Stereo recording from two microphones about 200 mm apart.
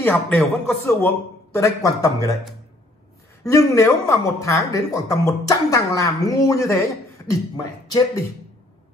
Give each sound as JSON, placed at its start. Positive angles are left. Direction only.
{"t": 0.0, "sound": "speech", "side_deg": 10}
{"t": 1.5, "sound": "speech", "side_deg": 15}
{"t": 3.4, "sound": "speech", "side_deg": 15}